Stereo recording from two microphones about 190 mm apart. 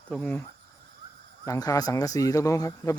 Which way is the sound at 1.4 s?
20° left (ahead or behind).